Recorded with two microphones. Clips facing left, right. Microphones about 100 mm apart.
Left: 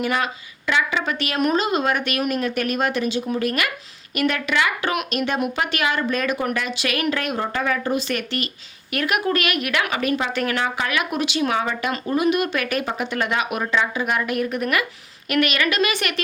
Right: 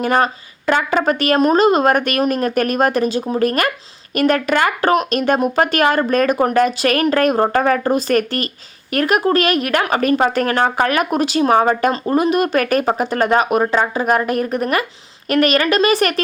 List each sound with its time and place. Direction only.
0.0 s speech: 40° right (ahead or behind)